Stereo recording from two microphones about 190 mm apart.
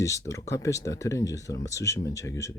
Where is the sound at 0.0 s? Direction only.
15° left (ahead or behind).